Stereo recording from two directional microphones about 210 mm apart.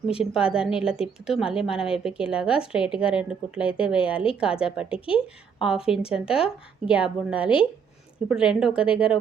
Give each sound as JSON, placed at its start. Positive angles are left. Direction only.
{"t": 0.2, "sound": "a woman's voice", "side_deg": -5}
{"t": 4.9, "sound": "speech", "side_deg": 25}
{"t": 5.5, "sound": "a woman's voice", "side_deg": -5}